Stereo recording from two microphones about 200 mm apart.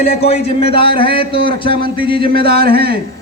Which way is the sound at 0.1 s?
30° left (ahead or behind).